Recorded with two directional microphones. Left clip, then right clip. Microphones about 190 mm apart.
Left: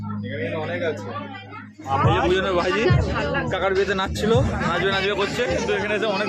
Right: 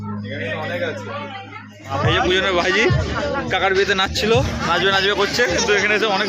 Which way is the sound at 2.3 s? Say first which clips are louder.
Right 4 dB; 5° right (ahead or behind).